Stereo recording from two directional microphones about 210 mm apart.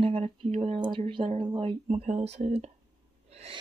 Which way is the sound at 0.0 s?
25° right (ahead or behind).